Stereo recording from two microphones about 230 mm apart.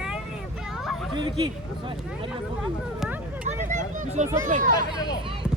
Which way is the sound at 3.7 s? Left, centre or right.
Right.